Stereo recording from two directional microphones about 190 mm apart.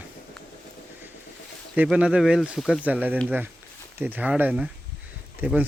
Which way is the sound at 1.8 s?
5° right (ahead or behind).